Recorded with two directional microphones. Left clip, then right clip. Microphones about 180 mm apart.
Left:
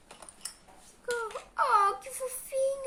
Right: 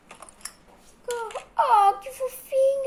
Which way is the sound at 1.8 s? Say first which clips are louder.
Right 8 dB; 25° left (ahead or behind).